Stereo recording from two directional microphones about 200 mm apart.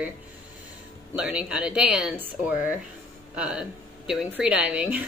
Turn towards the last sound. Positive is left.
turn(degrees=-5)  # may be behind; listen again after turning